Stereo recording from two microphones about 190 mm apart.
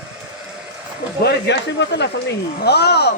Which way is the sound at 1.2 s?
65° left (ahead or behind).